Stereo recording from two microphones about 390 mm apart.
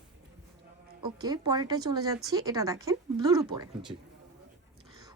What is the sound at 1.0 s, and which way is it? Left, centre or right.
Speech, centre.